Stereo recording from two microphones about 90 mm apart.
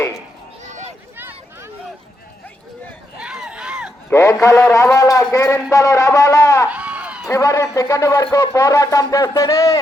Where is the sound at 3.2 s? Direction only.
10° right (ahead or behind).